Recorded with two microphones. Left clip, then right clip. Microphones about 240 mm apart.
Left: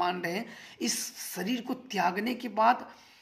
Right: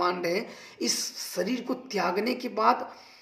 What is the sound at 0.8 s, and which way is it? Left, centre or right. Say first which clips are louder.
Speech: right 4 dB; left.